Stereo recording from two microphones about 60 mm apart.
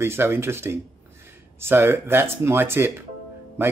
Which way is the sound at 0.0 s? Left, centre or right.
Right.